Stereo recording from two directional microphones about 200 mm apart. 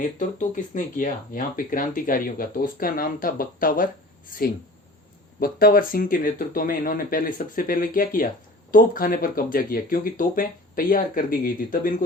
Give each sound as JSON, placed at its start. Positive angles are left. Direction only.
{"t": 0.0, "sound": "speech", "side_deg": 40}